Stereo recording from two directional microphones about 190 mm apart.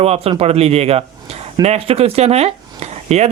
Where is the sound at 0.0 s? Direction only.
30° right (ahead or behind).